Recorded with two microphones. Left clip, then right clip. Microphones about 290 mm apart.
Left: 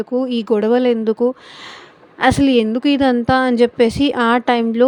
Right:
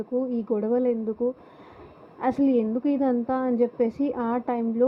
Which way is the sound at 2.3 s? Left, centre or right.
Left.